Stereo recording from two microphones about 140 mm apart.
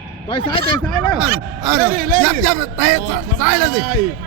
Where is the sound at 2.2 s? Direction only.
Centre (ahead or behind).